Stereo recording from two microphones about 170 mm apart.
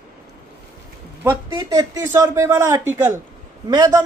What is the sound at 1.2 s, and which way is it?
A woman's voice, 20° right (ahead or behind).